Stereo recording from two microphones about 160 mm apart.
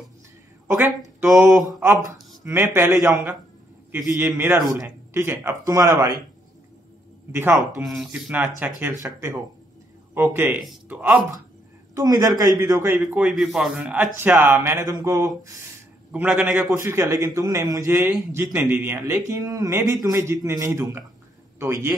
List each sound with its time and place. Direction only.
0.7 s speech: 10° right (ahead or behind)
1.8 s a man's voice: 20° right (ahead or behind)
4.2 s a man's voice: 15° right (ahead or behind)
7.3 s a man's voice: 15° right (ahead or behind)
7.8 s a man's voice: centre (ahead or behind)
11.9 s a man's voice: 20° right (ahead or behind)
16.1 s a man's voice: 10° right (ahead or behind)
16.7 s a man's voice: 20° right (ahead or behind)